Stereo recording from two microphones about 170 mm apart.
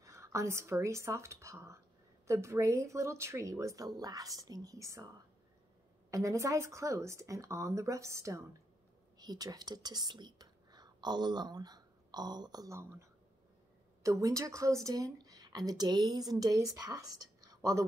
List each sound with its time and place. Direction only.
0.0 s speech: 15° right (ahead or behind)
6.0 s speech: 20° right (ahead or behind)
14.0 s speech: 20° right (ahead or behind)